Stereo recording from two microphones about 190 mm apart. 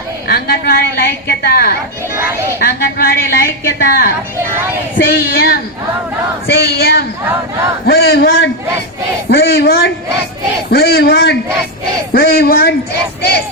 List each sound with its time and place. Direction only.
0.3 s a woman's voice: 55° left (ahead or behind)
9.3 s a man's voice: 60° left (ahead or behind)